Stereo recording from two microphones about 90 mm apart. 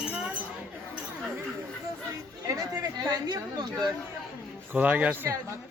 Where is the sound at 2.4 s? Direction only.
40° right (ahead or behind).